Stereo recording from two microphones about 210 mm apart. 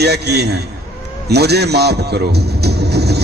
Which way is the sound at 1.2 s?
50° right (ahead or behind).